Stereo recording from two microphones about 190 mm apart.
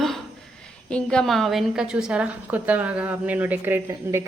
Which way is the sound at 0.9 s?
5° left (ahead or behind).